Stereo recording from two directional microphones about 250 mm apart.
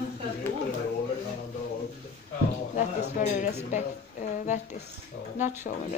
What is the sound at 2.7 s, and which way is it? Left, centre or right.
Music, left.